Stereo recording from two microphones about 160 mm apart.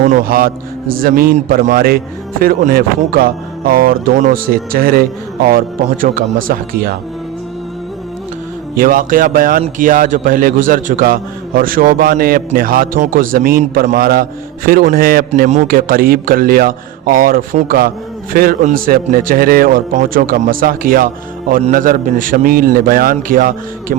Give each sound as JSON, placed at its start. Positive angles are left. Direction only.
{"t": 0.0, "sound": "a man's voice", "side_deg": -55}
{"t": 8.7, "sound": "a man's voice", "side_deg": -60}
{"t": 15.4, "sound": "a man's voice", "side_deg": -45}
{"t": 15.7, "sound": "a man's voice", "side_deg": -65}